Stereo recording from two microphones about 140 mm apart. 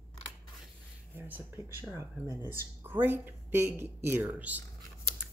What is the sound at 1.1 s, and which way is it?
Speech, 15° right (ahead or behind).